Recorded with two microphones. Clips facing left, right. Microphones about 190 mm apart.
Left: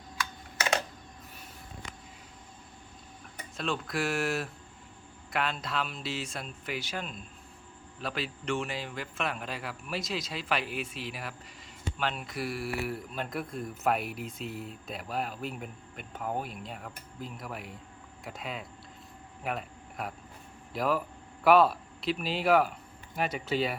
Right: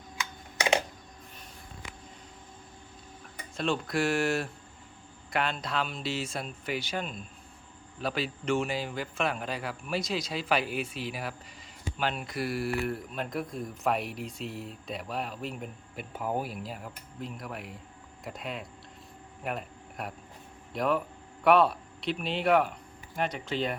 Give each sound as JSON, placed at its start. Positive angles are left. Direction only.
{"t": 0.2, "sound": "typing", "side_deg": -20}
{"t": 3.6, "sound": "a man's voice", "side_deg": 0}